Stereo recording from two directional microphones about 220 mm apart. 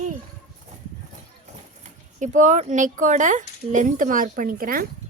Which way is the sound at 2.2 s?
35° right (ahead or behind).